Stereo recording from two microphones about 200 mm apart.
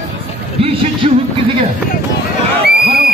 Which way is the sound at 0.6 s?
30° right (ahead or behind).